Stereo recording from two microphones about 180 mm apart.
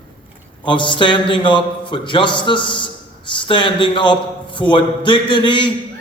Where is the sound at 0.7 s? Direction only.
25° left (ahead or behind).